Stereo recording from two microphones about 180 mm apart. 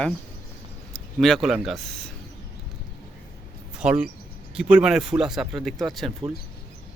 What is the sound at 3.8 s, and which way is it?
Speech, 5° right (ahead or behind).